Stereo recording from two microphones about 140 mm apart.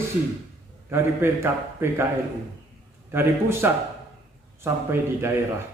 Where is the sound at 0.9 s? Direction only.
15° right (ahead or behind).